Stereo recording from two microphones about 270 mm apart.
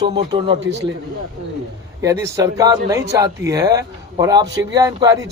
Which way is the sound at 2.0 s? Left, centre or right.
Centre.